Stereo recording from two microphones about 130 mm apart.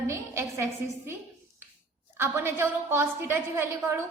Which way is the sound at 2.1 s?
15° right (ahead or behind).